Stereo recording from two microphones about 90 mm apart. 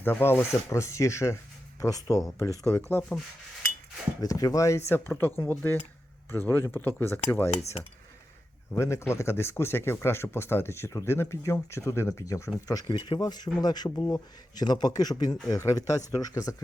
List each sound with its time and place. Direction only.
0.0 s speech: 25° left (ahead or behind)
4.2 s speech: 40° left (ahead or behind); by 7.5 s 25° left (ahead or behind)
8.7 s speech: 30° left (ahead or behind)